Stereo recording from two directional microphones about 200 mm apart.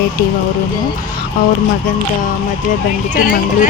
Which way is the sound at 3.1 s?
40° left (ahead or behind).